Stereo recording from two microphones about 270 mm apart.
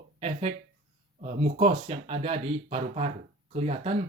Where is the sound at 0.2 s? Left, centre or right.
Right.